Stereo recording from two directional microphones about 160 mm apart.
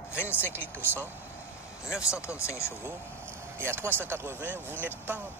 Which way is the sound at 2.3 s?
15° left (ahead or behind).